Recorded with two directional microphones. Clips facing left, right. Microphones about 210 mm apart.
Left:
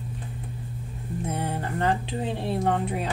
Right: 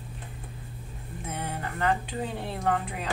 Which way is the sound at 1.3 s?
30° left (ahead or behind).